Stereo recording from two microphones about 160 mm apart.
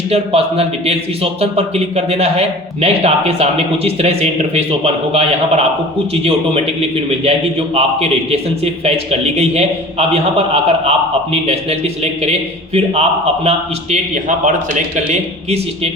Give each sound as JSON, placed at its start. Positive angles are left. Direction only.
{"t": 0.1, "sound": "speech", "side_deg": -40}
{"t": 6.2, "sound": "speech", "side_deg": -40}